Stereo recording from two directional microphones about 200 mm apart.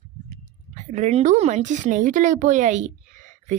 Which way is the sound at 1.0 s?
35° right (ahead or behind).